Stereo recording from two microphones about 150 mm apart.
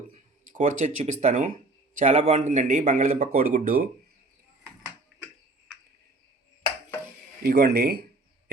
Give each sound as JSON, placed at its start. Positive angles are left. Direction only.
{"t": 0.5, "sound": "speech", "side_deg": -55}
{"t": 7.4, "sound": "speech", "side_deg": -90}